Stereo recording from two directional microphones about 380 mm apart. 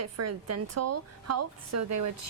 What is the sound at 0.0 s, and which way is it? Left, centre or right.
A woman's voice, right.